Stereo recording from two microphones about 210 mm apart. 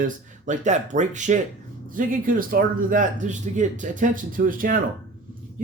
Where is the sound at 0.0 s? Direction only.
35° right (ahead or behind).